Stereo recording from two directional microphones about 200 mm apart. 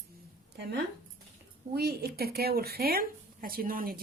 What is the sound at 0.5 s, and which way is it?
Speech, 55° right (ahead or behind).